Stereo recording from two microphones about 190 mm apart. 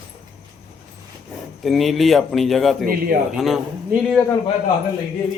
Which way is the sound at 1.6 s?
Centre (ahead or behind).